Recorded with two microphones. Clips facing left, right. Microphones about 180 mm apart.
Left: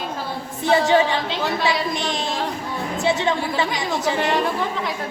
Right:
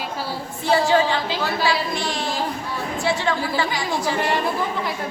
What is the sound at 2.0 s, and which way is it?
A woman's voice, 20° left (ahead or behind).